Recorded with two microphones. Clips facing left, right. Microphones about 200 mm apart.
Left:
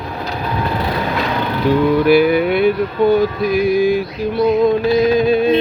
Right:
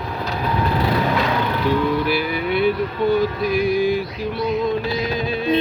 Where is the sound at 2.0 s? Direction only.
55° left (ahead or behind).